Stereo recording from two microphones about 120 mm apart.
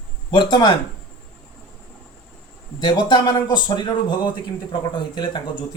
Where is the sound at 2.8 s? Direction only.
40° left (ahead or behind).